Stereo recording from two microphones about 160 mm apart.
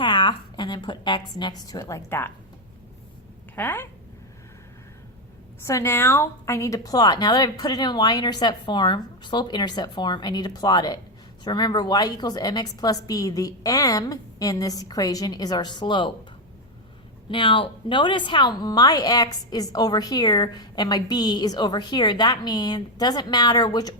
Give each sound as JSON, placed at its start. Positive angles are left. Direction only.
{"t": 0.0, "sound": "a woman's voice", "side_deg": 30}
{"t": 3.5, "sound": "speech", "side_deg": 10}
{"t": 5.6, "sound": "a woman's voice", "side_deg": 15}
{"t": 17.2, "sound": "a woman's voice", "side_deg": 30}